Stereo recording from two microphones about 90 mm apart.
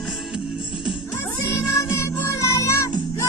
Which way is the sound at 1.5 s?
30° left (ahead or behind).